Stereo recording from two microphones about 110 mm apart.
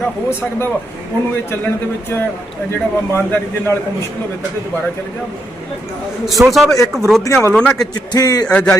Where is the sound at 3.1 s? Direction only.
20° left (ahead or behind).